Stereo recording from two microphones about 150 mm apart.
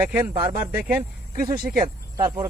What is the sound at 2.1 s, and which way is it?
Speech, 25° right (ahead or behind).